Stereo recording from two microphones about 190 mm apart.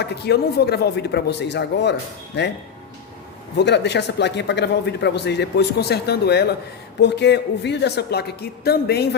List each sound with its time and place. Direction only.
0.0 s a man's voice: 60° left (ahead or behind)
3.6 s a man's voice: 65° left (ahead or behind)